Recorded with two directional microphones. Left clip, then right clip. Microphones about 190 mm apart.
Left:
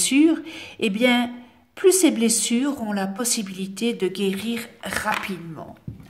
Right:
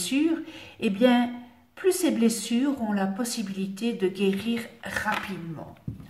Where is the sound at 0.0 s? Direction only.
50° left (ahead or behind).